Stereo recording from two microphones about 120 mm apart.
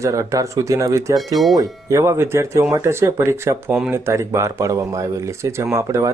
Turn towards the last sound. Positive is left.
turn(degrees=-25)  # may be behind; listen again after turning